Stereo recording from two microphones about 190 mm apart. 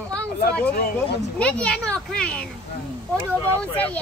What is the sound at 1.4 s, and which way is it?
Speech, 5° left (ahead or behind).